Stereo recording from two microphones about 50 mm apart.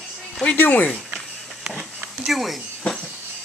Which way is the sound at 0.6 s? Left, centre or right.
Left.